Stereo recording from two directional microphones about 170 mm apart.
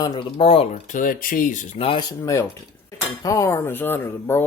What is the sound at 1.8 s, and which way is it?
Speech, 30° left (ahead or behind).